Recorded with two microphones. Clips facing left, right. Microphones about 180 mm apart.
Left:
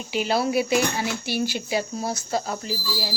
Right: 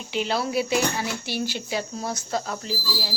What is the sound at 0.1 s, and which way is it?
Speech, 10° left (ahead or behind).